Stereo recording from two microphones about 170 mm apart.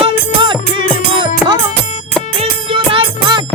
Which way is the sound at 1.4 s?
Centre (ahead or behind).